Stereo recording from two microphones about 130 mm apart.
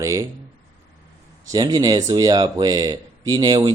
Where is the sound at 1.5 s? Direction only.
30° right (ahead or behind).